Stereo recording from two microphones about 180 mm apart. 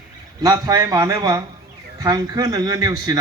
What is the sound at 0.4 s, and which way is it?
Speech, 20° right (ahead or behind).